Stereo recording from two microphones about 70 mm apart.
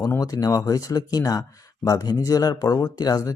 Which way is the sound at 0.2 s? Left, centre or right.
Left.